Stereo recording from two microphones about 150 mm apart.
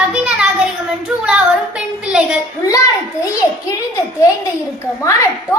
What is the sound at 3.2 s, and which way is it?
Speech, 25° left (ahead or behind).